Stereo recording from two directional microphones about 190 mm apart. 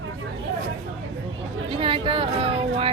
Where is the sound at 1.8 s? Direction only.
30° right (ahead or behind).